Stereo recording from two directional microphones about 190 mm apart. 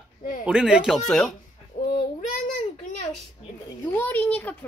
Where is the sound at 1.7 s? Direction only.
40° left (ahead or behind).